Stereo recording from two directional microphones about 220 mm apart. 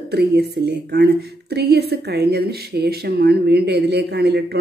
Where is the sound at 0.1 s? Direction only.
50° right (ahead or behind).